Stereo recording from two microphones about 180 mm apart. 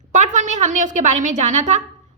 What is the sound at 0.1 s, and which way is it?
A woman's voice, 40° right (ahead or behind).